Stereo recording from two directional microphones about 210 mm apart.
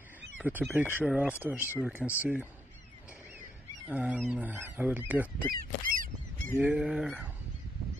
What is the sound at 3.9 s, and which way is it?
Speech, 5° right (ahead or behind).